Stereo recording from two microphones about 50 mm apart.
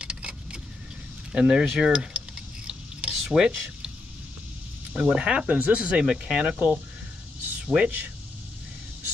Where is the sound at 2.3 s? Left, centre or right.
Centre.